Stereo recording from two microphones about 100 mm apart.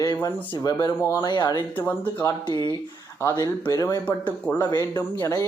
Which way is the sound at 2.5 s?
50° left (ahead or behind).